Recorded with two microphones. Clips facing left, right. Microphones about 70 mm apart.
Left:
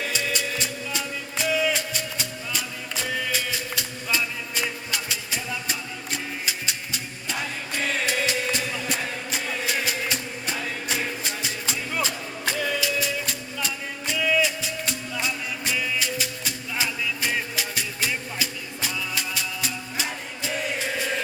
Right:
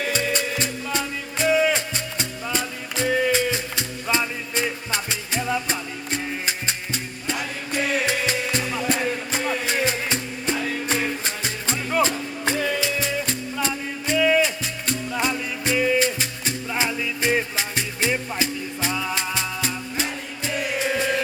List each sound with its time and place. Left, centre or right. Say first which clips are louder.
0.1 s music: right 4 dB; right
14.2 s music: right 4 dB; right